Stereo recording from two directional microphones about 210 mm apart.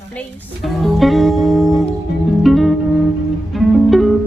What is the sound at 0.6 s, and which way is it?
Music, centre (ahead or behind).